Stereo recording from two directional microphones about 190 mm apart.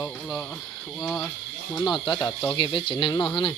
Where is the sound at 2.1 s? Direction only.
25° left (ahead or behind).